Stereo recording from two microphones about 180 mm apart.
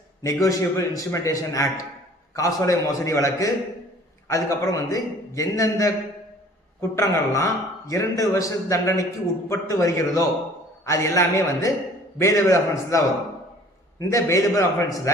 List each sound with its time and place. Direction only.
0.2 s a man's voice: 15° left (ahead or behind)
6.9 s a man's voice: 15° left (ahead or behind)
14.0 s a man's voice: 15° left (ahead or behind)